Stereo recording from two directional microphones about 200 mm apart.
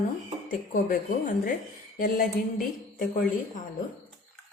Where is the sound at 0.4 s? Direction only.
40° left (ahead or behind).